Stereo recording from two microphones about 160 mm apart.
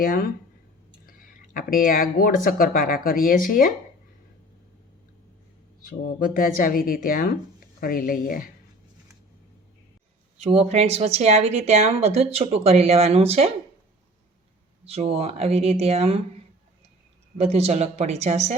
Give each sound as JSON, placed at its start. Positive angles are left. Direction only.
{"t": 0.0, "sound": "speech", "side_deg": 65}
{"t": 5.9, "sound": "speech", "side_deg": 60}
{"t": 10.3, "sound": "speech", "side_deg": -40}
{"t": 14.8, "sound": "speech", "side_deg": -40}
{"t": 17.3, "sound": "speech", "side_deg": -40}